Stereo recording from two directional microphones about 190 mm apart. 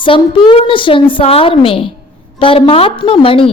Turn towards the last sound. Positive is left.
turn(degrees=30)  # may be behind; listen again after turning